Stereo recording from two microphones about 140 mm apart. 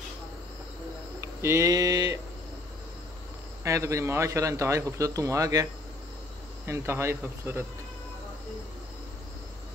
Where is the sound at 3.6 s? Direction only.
20° right (ahead or behind).